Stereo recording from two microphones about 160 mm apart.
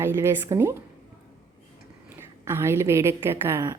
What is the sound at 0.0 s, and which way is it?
Speech, 15° right (ahead or behind).